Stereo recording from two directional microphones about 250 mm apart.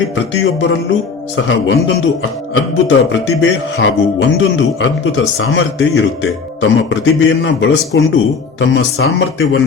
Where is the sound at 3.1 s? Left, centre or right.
Left.